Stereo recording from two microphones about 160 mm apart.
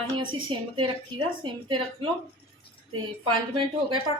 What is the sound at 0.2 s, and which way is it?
A woman's voice, 30° right (ahead or behind).